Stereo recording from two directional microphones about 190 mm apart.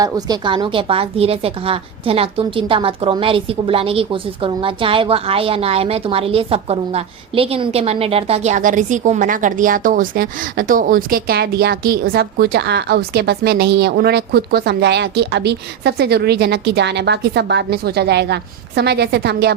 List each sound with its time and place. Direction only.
0.0 s a woman's voice: 25° right (ahead or behind); by 19.5 s 60° right (ahead or behind)